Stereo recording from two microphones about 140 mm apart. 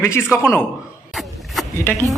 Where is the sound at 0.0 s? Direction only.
15° left (ahead or behind).